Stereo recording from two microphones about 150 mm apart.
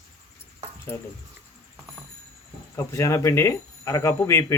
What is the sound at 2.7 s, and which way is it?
Speech, 20° left (ahead or behind).